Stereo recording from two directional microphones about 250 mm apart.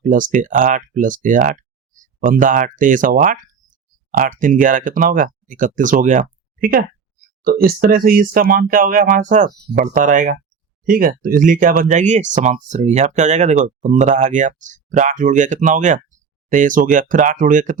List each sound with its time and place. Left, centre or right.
0.0 s speech: right